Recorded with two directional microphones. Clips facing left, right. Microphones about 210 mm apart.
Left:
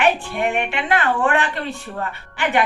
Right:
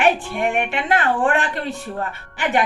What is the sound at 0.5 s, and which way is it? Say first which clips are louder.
Speech: right 1 dB; 45° right (ahead or behind).